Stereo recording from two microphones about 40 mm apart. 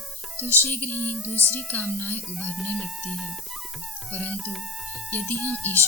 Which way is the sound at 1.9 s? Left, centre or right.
Left.